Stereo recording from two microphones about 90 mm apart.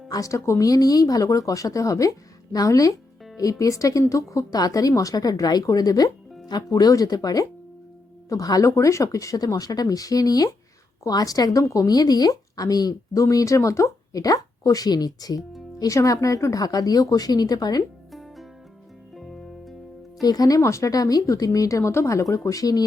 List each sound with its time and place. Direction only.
0.1 s a woman's voice: 35° left (ahead or behind)
18.1 s plop: centre (ahead or behind)
19.1 s music: centre (ahead or behind)
20.2 s a woman's voice: 45° left (ahead or behind)